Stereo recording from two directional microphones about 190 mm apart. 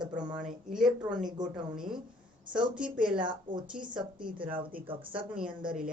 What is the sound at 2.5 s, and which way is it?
Speech, 25° right (ahead or behind).